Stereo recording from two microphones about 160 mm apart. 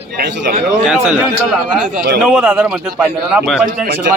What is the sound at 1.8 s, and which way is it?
Speech, 55° right (ahead or behind).